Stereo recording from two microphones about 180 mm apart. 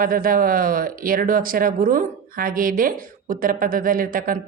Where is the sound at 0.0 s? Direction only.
50° right (ahead or behind).